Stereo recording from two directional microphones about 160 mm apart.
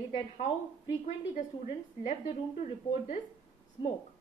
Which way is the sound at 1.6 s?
45° left (ahead or behind).